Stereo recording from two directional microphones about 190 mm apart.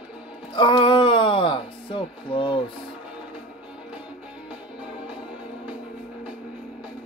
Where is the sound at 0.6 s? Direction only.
25° left (ahead or behind).